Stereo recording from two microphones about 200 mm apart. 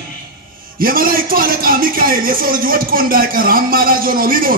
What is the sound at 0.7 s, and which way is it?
A man's voice, 45° right (ahead or behind).